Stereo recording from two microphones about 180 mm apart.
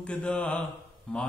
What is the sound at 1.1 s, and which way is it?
Speech, 5° left (ahead or behind).